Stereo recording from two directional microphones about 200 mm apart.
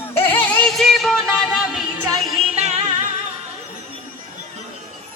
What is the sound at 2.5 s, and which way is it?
Music, 35° right (ahead or behind).